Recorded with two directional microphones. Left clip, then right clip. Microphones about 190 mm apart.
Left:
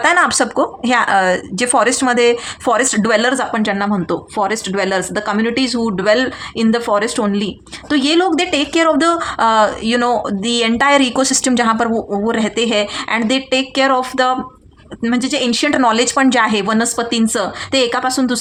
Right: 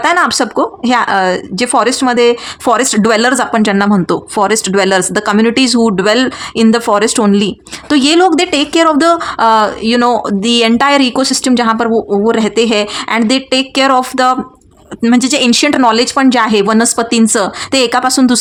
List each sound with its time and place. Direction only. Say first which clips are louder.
0.0 s speech: right 2 dB; 25° right (ahead or behind); by 18.3 s 40° right (ahead or behind)